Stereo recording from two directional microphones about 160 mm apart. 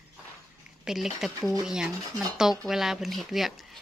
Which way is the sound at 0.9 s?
Centre (ahead or behind).